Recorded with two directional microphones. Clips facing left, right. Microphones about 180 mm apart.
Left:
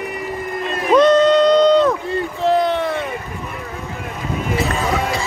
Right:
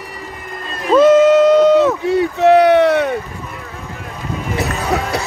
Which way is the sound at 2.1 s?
75° right (ahead or behind).